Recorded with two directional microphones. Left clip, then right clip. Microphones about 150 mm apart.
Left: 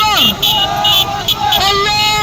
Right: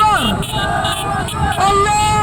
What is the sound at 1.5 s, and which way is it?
Yodeling, 5° right (ahead or behind).